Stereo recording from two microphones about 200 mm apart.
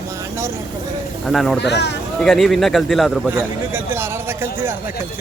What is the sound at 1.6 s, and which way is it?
Speech, 60° left (ahead or behind).